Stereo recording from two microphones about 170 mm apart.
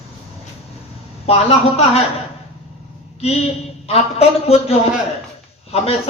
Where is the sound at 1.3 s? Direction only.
35° left (ahead or behind).